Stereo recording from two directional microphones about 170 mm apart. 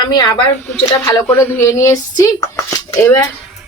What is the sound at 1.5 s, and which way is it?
Speech, 15° left (ahead or behind).